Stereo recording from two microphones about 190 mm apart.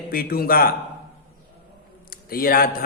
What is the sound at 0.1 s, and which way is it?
Speech, 50° left (ahead or behind).